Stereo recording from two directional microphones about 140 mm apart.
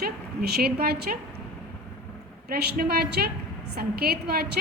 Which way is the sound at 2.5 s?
90° right.